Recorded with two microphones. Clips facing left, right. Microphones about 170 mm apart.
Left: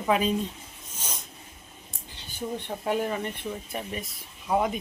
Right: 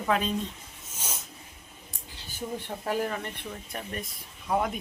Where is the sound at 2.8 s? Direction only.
5° left (ahead or behind).